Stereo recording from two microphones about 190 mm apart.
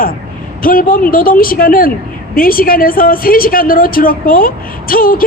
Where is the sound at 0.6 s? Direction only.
50° left (ahead or behind).